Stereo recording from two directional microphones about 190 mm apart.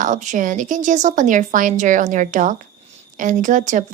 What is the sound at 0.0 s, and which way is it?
Speech, 40° right (ahead or behind).